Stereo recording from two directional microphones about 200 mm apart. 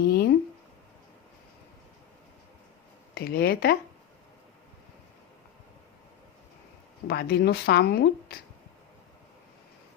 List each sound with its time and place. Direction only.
0.0 s a sound: 55° left (ahead or behind)
3.2 s speech: 50° left (ahead or behind)
7.1 s speech: 55° left (ahead or behind)